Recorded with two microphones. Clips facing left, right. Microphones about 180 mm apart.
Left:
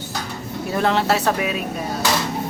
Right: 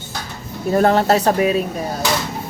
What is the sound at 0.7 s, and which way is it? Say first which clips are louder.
Speech: right 5 dB; 45° right (ahead or behind).